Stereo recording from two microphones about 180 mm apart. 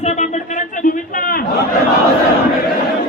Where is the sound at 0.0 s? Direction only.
40° left (ahead or behind).